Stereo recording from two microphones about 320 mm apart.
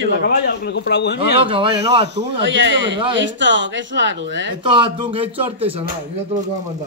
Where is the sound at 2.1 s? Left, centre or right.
Right.